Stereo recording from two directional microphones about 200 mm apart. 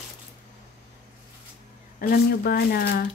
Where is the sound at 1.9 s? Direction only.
50° left (ahead or behind).